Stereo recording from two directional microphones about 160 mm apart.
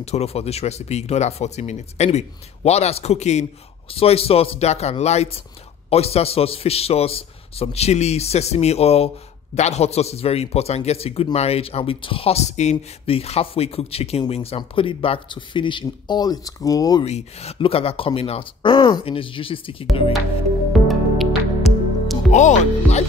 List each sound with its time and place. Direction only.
0.0 s a man's voice: 40° left (ahead or behind); by 17.0 s 20° left (ahead or behind)
17.0 s a man's voice: 40° left (ahead or behind)
20.7 s music: centre (ahead or behind)
22.3 s speech: 50° left (ahead or behind)